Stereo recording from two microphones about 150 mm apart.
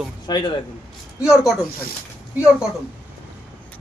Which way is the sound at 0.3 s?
30° left (ahead or behind).